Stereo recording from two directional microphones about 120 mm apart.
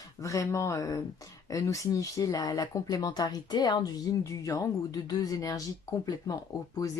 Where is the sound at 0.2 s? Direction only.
25° left (ahead or behind).